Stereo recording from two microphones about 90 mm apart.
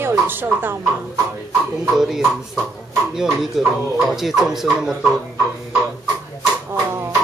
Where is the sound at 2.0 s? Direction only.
5° right (ahead or behind).